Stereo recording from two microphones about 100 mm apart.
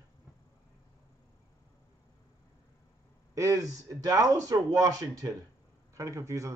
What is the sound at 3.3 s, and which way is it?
Speech, 35° right (ahead or behind).